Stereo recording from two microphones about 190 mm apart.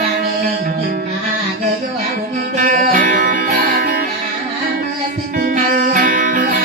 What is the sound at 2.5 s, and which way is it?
Music, 45° right (ahead or behind).